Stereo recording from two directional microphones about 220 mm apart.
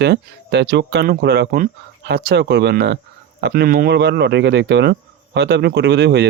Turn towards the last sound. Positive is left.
turn(degrees=-50)  # may be behind; listen again after turning